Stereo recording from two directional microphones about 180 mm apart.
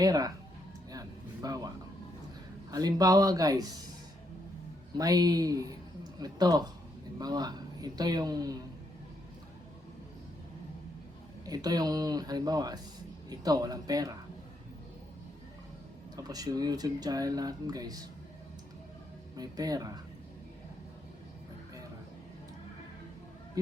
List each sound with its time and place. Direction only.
0.0 s speech: 20° right (ahead or behind)
0.9 s a sound: 20° right (ahead or behind)
2.6 s speech: 20° right (ahead or behind)
4.9 s speech: 20° right (ahead or behind)
11.4 s speech: 20° right (ahead or behind)
16.1 s speech: 20° right (ahead or behind)
19.4 s speech: 20° right (ahead or behind)